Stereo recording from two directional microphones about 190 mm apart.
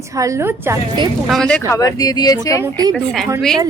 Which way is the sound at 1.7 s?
20° left (ahead or behind).